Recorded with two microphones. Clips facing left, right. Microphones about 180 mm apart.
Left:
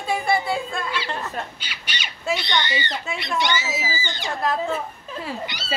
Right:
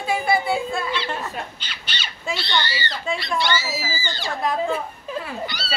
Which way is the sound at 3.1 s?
20° left (ahead or behind).